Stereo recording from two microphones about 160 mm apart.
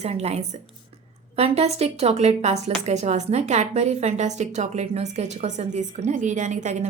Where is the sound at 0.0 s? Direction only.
40° right (ahead or behind).